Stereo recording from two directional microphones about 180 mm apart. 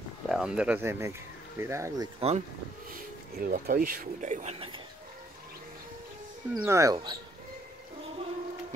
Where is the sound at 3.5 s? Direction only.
55° right (ahead or behind).